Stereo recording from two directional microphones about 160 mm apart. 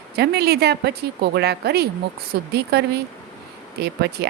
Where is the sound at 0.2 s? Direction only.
85° right.